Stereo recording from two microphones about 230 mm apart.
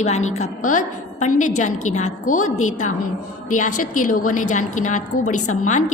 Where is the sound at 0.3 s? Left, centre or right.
Left.